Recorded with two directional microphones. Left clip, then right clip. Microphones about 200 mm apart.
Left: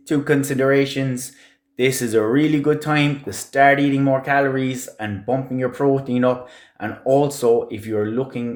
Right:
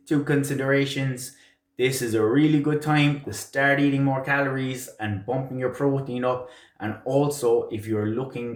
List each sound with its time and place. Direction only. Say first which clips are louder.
0.1 s speech: left 5 dB; 50° left (ahead or behind)